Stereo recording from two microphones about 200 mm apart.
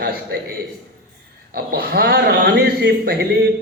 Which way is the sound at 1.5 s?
50° right (ahead or behind).